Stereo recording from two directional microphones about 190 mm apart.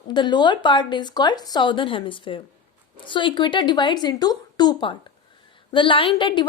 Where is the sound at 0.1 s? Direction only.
25° left (ahead or behind).